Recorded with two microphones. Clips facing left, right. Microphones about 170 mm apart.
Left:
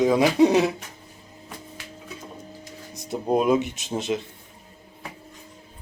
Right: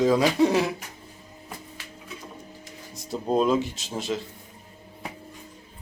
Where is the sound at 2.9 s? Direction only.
15° left (ahead or behind).